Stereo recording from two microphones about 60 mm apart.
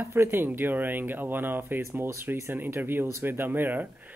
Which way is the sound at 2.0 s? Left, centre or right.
Right.